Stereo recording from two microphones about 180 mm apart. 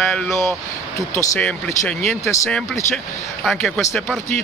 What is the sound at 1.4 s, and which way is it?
Speech, 5° left (ahead or behind).